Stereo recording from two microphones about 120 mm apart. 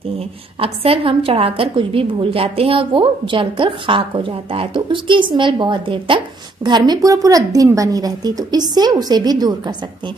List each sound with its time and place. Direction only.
0.6 s a woman's voice: 50° right (ahead or behind); by 9.8 s 35° right (ahead or behind)